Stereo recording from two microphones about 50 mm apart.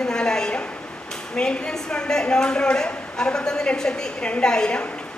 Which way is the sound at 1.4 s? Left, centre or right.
Centre.